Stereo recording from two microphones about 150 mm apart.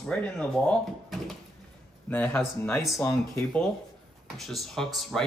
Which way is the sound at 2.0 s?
10° left (ahead or behind).